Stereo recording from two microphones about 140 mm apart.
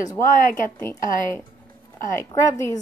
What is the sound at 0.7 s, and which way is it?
Speech, 15° left (ahead or behind).